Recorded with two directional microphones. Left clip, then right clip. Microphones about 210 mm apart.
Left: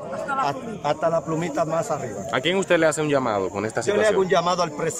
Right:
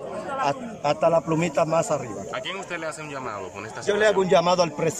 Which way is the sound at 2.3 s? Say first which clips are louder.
Left 12 dB; 45° left (ahead or behind).